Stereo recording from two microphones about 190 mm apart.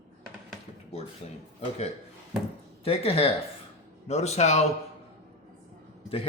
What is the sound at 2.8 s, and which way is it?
Speech, 30° left (ahead or behind).